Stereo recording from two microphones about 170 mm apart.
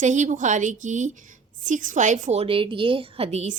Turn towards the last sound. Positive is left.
turn(degrees=-40)  # may be behind; listen again after turning